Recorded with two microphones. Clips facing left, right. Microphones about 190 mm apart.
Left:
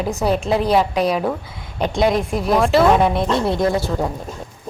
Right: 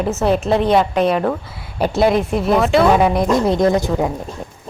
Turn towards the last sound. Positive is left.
turn(degrees=-20)  # may be behind; listen again after turning